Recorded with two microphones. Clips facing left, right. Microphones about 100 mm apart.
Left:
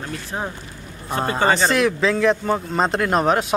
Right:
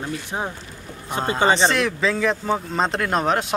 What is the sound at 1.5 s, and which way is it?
Speech, centre (ahead or behind).